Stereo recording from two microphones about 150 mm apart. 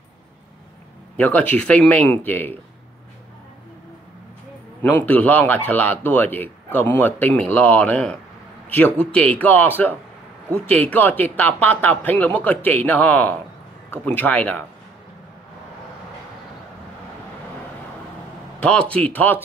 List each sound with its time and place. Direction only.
1.1 s speech: 10° left (ahead or behind)
4.8 s a man's voice: 10° left (ahead or behind)
18.6 s speech: 10° left (ahead or behind)